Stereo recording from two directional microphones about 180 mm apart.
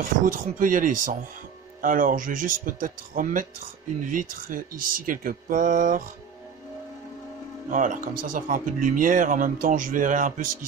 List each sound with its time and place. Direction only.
0.2 s speech: 50° right (ahead or behind)
7.7 s speech: 45° right (ahead or behind)